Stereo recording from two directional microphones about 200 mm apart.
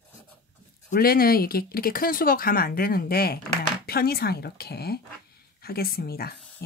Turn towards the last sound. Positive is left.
turn(degrees=50)  # may be behind; listen again after turning